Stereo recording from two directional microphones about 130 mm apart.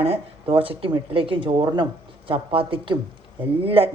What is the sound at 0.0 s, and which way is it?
A woman's voice, 50° right (ahead or behind).